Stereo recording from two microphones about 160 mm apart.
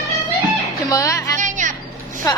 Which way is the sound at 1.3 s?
50° right (ahead or behind).